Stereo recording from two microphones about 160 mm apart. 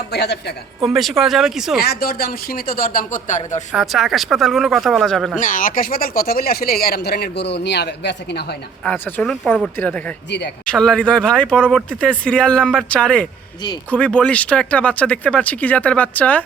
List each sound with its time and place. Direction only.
0.1 s a woman's voice: 90° left
0.9 s speech: centre (ahead or behind)
1.8 s speech: 75° left (ahead or behind); by 3.6 s 50° left (ahead or behind)
3.7 s speech: centre (ahead or behind)
5.4 s speech: 55° left (ahead or behind); by 8.5 s 90° left
8.8 s speech: 10° left (ahead or behind)
10.2 s a woman's voice: 90° left
10.7 s speech: 5° left (ahead or behind)